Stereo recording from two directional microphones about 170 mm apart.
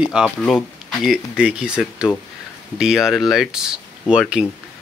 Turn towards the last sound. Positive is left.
turn(degrees=-5)  # may be behind; listen again after turning